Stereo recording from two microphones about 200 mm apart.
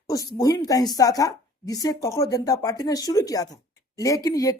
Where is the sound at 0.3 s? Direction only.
15° left (ahead or behind).